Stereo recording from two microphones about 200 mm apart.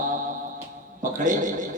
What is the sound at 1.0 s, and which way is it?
Speech, 40° right (ahead or behind).